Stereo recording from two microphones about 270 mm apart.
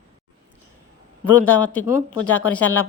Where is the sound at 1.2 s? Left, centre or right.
Centre.